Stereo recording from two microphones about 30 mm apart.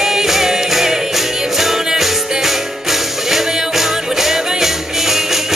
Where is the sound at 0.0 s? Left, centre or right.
Centre.